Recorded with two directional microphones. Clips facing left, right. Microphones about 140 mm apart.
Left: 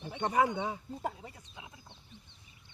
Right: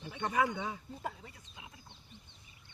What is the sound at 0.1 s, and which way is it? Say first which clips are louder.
Speech: left 3 dB; 25° left (ahead or behind).